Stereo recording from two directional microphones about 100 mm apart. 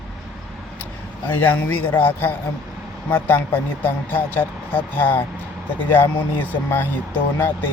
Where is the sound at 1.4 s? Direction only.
15° left (ahead or behind).